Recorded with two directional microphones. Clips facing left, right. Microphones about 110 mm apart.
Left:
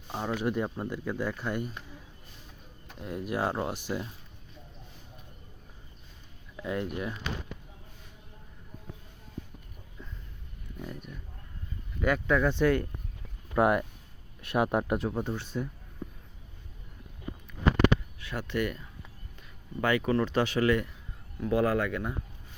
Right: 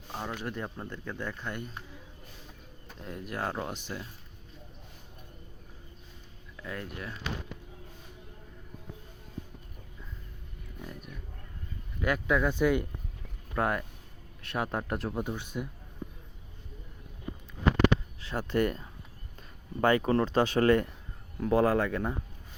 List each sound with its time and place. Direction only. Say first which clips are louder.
0.1 s speech: left 6 dB; 10° left (ahead or behind)
3.0 s speech: left 5 dB; 10° left (ahead or behind)
6.6 s speech: left 7 dB; 20° left (ahead or behind)
10.8 s a sound: left 3 dB; 5° right (ahead or behind)
11.9 s speech: left 2 dB; 5° right (ahead or behind)
13.6 s speech: left 5 dB; 15° left (ahead or behind)
14.9 s speech: left 3 dB; centre (ahead or behind)
15.4 s speech: left 2 dB; 10° right (ahead or behind)
18.2 s speech: right 3 dB; 35° right (ahead or behind)